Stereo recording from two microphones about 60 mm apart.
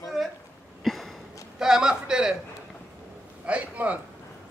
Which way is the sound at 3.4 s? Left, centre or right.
Right.